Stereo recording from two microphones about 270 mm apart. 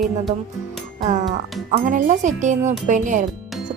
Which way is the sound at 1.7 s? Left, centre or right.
Right.